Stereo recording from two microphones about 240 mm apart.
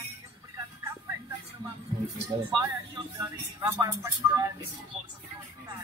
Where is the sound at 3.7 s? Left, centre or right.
Centre.